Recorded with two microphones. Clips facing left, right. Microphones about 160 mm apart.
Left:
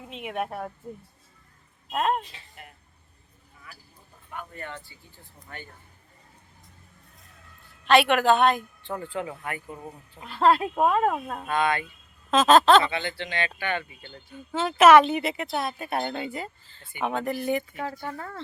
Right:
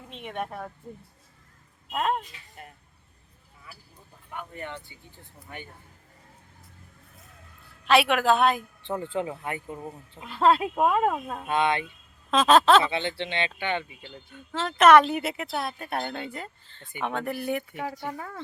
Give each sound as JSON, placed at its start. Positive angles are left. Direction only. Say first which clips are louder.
{"t": 0.1, "sound": "speech", "louder": "left 3 dB", "side_deg": 5}
{"t": 1.9, "sound": "speech", "louder": "left 2 dB", "side_deg": 10}
{"t": 4.3, "sound": "speech", "louder": "right 1 dB", "side_deg": -15}
{"t": 7.9, "sound": "speech", "louder": "left 2 dB", "side_deg": 0}
{"t": 8.9, "sound": "speech", "louder": "right 3 dB", "side_deg": -20}
{"t": 10.3, "sound": "speech", "louder": "even", "side_deg": 0}
{"t": 11.4, "sound": "speech", "louder": "right 1 dB", "side_deg": -25}
{"t": 12.3, "sound": "speech", "louder": "left 1 dB", "side_deg": 0}
{"t": 12.9, "sound": "speech", "louder": "right 2 dB", "side_deg": -25}
{"t": 14.3, "sound": "speech", "louder": "left 3 dB", "side_deg": 10}